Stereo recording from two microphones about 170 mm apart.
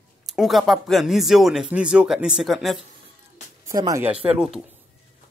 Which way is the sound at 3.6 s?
20° right (ahead or behind).